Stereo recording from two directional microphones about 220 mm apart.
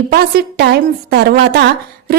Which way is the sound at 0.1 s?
45° right (ahead or behind).